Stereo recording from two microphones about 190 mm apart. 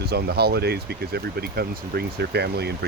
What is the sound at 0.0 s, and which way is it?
Speech, 60° right (ahead or behind).